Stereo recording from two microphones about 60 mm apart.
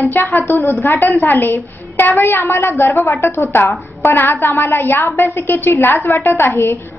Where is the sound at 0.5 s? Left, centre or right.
Left.